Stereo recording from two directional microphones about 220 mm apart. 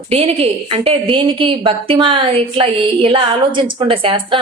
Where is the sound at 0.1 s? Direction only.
25° right (ahead or behind).